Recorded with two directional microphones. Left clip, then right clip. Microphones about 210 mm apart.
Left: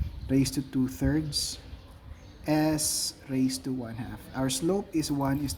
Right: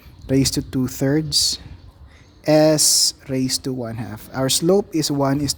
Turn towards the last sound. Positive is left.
turn(degrees=-50)  # may be behind; listen again after turning